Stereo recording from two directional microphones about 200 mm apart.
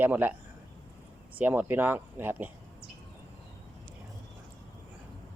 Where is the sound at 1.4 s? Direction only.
10° right (ahead or behind).